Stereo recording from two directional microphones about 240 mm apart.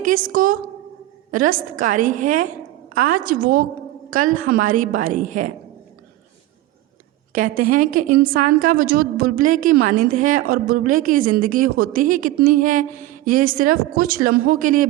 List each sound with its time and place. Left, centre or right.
0.0 s a woman's voice: right
7.3 s a woman's voice: right